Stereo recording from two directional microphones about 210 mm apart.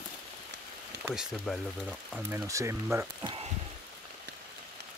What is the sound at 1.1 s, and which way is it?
Speech, centre (ahead or behind).